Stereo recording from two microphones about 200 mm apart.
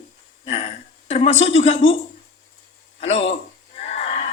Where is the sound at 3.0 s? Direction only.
30° left (ahead or behind).